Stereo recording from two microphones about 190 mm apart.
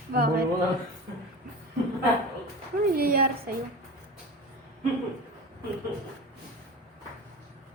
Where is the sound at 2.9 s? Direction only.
50° right (ahead or behind).